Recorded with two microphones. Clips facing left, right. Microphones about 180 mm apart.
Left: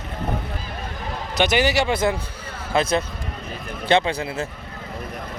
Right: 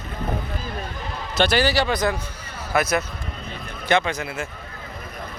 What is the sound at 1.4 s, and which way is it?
Speech, 20° left (ahead or behind).